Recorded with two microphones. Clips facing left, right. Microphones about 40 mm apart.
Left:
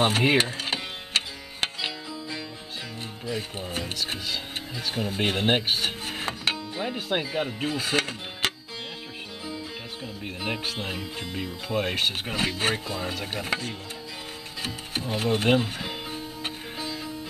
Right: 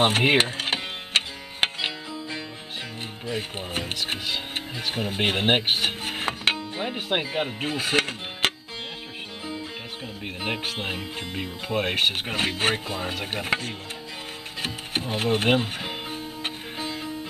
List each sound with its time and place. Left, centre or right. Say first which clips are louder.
0.0 s speech: right 2 dB; right
1.1 s music: right 3 dB; right
3.3 s speech: right 1 dB; right
10.2 s speech: right 1 dB; right
14.6 s music: right 3 dB; right